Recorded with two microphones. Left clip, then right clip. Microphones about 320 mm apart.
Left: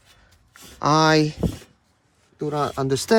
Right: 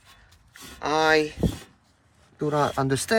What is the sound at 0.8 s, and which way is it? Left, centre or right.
Speech, centre.